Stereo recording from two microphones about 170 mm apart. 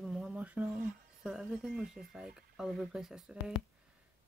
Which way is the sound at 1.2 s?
5° right (ahead or behind).